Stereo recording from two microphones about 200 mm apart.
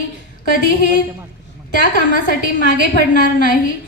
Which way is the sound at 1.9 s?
45° left (ahead or behind).